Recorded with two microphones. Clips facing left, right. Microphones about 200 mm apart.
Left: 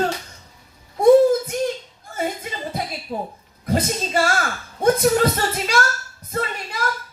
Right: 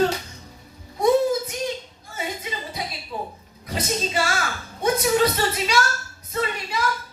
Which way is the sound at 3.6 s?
50° left (ahead or behind).